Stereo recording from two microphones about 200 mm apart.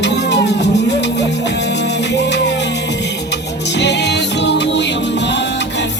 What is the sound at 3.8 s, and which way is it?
Music, 60° left (ahead or behind).